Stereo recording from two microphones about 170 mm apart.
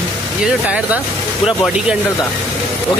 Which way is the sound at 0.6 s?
10° right (ahead or behind).